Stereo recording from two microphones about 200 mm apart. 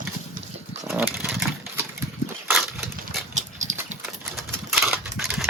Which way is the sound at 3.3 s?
35° right (ahead or behind).